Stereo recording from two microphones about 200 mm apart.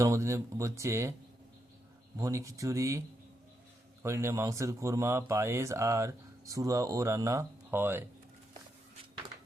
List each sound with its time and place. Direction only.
0.0 s speech: 15° right (ahead or behind)
2.1 s speech: 15° right (ahead or behind)
4.0 s speech: 15° right (ahead or behind)